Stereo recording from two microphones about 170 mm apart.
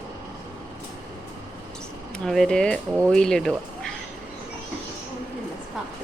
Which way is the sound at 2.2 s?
5° left (ahead or behind).